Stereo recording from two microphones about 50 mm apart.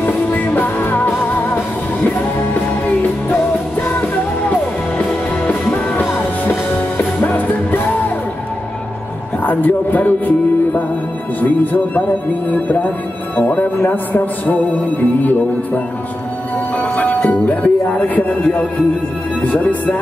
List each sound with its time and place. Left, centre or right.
0.0 s music: left
5.5 s music: left
9.4 s a man's voice: left
16.7 s music: left
19.4 s a man's voice: left